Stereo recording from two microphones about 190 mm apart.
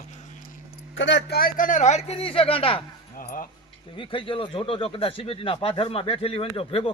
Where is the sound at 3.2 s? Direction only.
45° left (ahead or behind).